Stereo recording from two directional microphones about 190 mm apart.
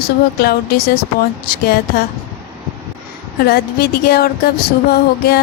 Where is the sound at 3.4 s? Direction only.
55° left (ahead or behind).